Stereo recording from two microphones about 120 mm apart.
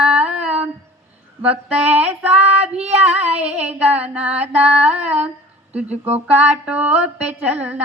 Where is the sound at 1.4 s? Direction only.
10° right (ahead or behind).